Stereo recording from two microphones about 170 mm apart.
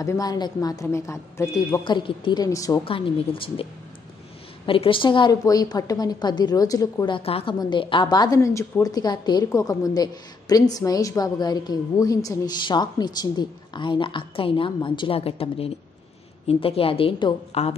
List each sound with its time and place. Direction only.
0.0 s a woman's voice: 20° left (ahead or behind)
2.8 s a woman's voice: 30° left (ahead or behind)
4.6 s a woman's voice: 30° left (ahead or behind)